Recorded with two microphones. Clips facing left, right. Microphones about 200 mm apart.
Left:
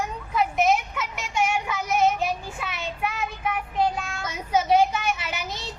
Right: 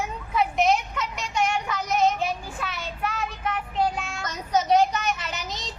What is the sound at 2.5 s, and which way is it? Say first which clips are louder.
Child singing: left 1 dB; 10° left (ahead or behind).